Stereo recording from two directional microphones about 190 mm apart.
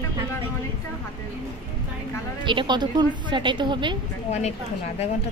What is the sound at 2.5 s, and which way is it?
A woman's voice, 25° right (ahead or behind).